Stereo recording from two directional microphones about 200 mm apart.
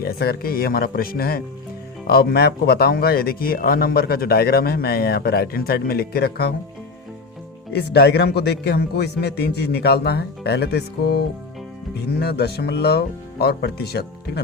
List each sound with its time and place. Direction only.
0.0 s speech: 50° left (ahead or behind)
7.7 s a man's voice: 55° left (ahead or behind)